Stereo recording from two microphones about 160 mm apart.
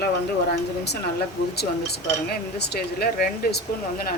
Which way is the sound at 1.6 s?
90° left.